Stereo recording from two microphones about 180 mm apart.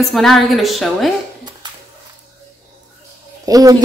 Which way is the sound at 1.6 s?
25° right (ahead or behind).